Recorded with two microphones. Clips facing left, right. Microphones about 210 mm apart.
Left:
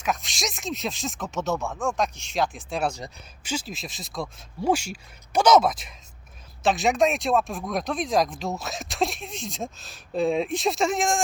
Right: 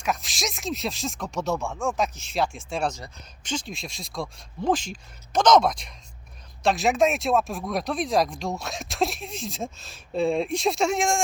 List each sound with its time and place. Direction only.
0.0 s speech: centre (ahead or behind)